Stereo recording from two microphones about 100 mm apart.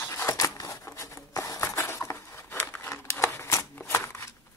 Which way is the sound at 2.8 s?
25° left (ahead or behind).